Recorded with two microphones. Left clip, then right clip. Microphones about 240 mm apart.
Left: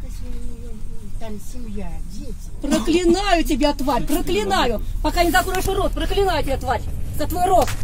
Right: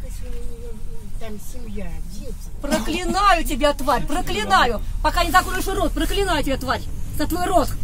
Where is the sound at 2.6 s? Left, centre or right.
Right.